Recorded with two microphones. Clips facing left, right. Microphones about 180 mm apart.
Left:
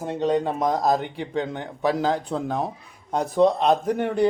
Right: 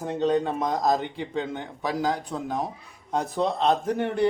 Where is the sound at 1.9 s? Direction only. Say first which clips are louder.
Left 3 dB; 25° left (ahead or behind).